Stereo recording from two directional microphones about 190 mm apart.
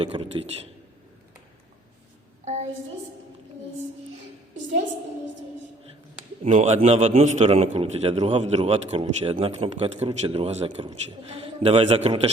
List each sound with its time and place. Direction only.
0.0 s a man's voice: 30° right (ahead or behind)
2.4 s a sound: 35° right (ahead or behind)
6.4 s a man's voice: 35° right (ahead or behind)